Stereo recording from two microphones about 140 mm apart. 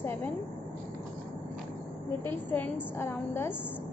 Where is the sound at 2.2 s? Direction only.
15° left (ahead or behind).